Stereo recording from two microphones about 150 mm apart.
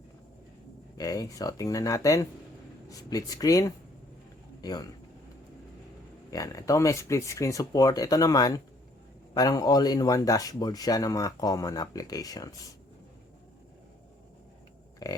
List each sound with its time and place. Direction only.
0.9 s speech: 25° left (ahead or behind)
6.3 s speech: 20° left (ahead or behind)
15.0 s speech: 25° left (ahead or behind)